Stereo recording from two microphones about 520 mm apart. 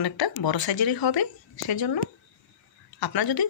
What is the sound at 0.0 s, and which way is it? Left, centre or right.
Speech, left.